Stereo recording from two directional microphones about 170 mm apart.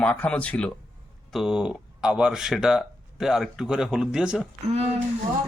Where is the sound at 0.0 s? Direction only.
5° left (ahead or behind).